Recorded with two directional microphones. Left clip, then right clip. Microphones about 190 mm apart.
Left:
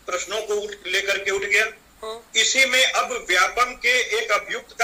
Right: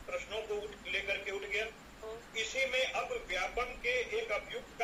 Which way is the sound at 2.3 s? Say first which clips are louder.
Left 16 dB; 50° left (ahead or behind).